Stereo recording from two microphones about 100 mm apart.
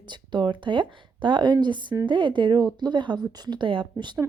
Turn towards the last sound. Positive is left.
turn(degrees=-55)  # may be behind; listen again after turning